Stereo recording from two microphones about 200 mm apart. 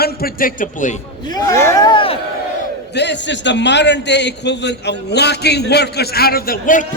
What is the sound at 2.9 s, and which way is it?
A man's voice, 60° left (ahead or behind).